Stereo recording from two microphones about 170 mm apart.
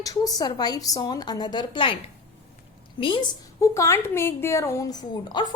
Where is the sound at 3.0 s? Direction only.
25° left (ahead or behind).